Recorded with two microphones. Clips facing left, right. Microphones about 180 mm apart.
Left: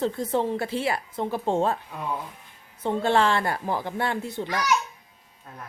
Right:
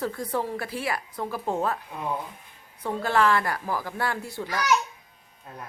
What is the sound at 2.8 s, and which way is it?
A woman's voice, 25° left (ahead or behind).